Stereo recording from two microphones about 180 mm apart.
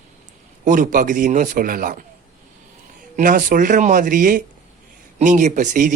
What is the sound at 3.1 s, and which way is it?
Speech, 50° right (ahead or behind).